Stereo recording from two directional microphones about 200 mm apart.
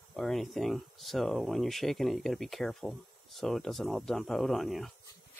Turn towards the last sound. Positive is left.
turn(degrees=0)  # may be behind; listen again after turning